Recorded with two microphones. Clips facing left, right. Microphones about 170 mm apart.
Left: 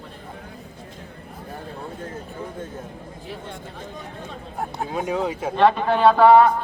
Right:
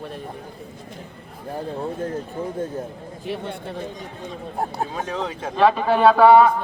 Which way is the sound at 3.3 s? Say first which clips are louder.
Right 8 dB; 70° right (ahead or behind).